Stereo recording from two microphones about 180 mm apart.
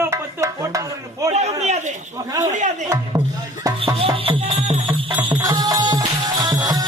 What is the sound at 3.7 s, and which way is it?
Music, 20° right (ahead or behind).